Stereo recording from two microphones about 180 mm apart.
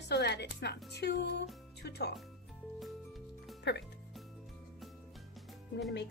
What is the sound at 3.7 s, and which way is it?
Speech, 75° left (ahead or behind).